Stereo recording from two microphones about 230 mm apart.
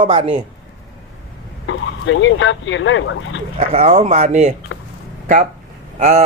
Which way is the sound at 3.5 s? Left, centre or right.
Right.